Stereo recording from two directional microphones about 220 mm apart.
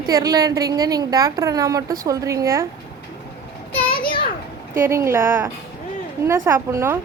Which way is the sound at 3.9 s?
20° left (ahead or behind).